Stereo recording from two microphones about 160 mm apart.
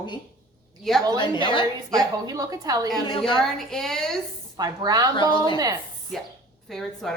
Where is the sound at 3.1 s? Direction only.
30° left (ahead or behind).